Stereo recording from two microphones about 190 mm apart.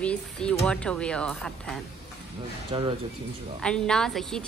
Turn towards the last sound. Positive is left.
turn(degrees=5)  # may be behind; listen again after turning